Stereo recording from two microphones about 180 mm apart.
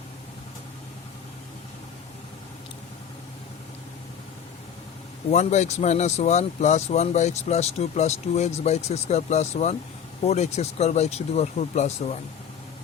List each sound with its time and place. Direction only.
5.3 s speech: 40° left (ahead or behind)